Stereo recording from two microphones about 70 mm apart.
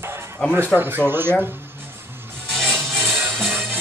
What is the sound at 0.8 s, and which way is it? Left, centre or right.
Speech, right.